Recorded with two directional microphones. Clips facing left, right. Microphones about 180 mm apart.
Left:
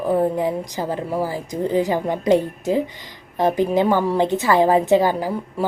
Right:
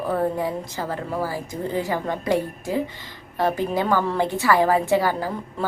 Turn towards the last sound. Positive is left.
turn(degrees=15)  # may be behind; listen again after turning